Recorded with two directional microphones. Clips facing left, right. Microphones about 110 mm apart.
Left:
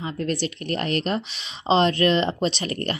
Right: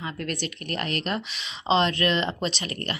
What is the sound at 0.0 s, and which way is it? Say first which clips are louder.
Speech: left 5 dB; 30° left (ahead or behind).